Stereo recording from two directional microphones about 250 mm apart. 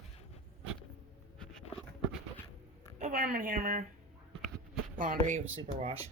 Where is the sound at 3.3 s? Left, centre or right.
Right.